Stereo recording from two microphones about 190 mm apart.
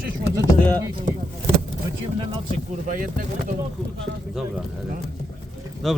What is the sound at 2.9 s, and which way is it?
Speech, 45° right (ahead or behind).